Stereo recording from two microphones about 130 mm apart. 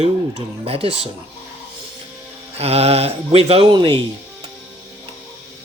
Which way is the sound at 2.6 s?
50° right (ahead or behind).